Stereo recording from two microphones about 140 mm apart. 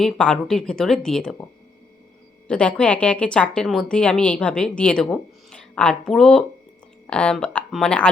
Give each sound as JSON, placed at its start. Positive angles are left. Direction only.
{"t": 0.0, "sound": "speech", "side_deg": 5}
{"t": 2.5, "sound": "a woman's voice", "side_deg": 5}